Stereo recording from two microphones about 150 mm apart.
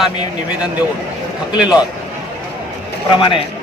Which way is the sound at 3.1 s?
35° left (ahead or behind).